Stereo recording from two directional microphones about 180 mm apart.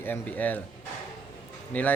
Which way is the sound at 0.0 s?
10° left (ahead or behind).